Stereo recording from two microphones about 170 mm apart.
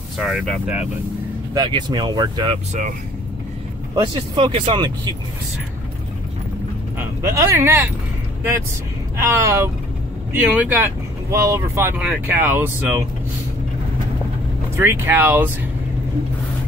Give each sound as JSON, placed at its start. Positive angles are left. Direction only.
{"t": 0.2, "sound": "speech", "side_deg": 0}
{"t": 1.5, "sound": "speech", "side_deg": -25}
{"t": 3.9, "sound": "speech", "side_deg": -30}
{"t": 7.0, "sound": "speech", "side_deg": -20}
{"t": 9.2, "sound": "speech", "side_deg": -20}
{"t": 14.8, "sound": "speech", "side_deg": -15}